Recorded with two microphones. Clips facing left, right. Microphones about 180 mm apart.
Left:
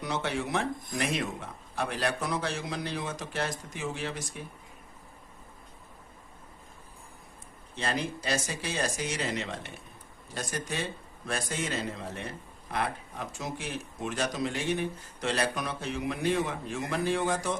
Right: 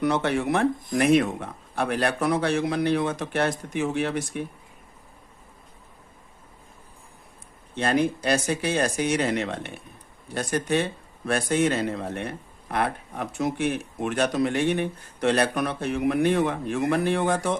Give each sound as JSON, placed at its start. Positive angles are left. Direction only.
{"t": 0.0, "sound": "a man's voice", "side_deg": -60}
{"t": 7.8, "sound": "a man's voice", "side_deg": -60}